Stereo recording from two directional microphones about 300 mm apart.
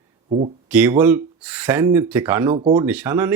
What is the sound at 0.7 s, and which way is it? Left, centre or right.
Speech, centre.